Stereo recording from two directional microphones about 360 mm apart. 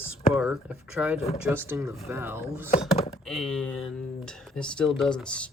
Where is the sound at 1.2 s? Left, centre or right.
Centre.